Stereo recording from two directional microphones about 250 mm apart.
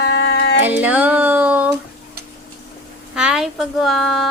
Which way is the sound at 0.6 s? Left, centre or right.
Centre.